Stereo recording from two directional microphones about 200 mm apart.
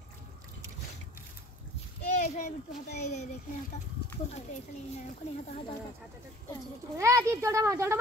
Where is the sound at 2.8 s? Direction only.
55° left (ahead or behind).